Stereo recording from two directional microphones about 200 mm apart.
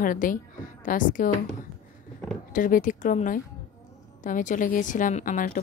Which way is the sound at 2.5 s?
40° left (ahead or behind).